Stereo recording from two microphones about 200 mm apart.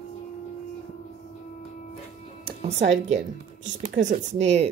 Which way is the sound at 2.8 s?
65° right (ahead or behind).